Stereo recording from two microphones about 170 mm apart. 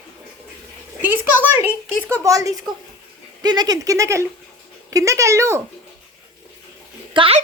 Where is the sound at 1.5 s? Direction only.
10° right (ahead or behind).